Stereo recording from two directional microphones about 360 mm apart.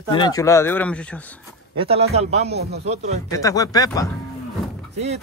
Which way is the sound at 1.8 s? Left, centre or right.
Centre.